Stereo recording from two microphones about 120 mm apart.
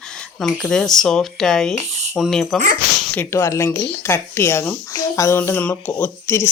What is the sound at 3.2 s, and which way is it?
Speech, 25° left (ahead or behind).